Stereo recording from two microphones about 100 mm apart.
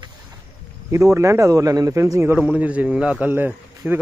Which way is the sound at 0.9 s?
30° right (ahead or behind).